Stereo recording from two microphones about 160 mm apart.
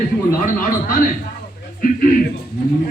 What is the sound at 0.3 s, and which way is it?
Speech, 55° left (ahead or behind).